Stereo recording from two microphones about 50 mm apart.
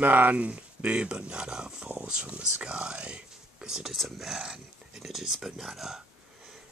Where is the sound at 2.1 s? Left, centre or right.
Centre.